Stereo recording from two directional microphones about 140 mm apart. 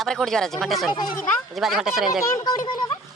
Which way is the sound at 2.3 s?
25° left (ahead or behind).